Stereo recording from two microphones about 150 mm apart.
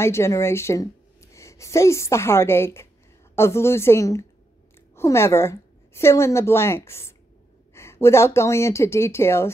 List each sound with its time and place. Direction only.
0.0 s a woman's voice: 15° left (ahead or behind)